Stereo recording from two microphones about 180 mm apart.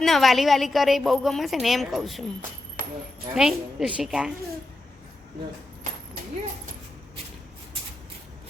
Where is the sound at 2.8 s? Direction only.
50° right (ahead or behind).